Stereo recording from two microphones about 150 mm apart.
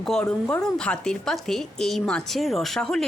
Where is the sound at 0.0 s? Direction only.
5° left (ahead or behind).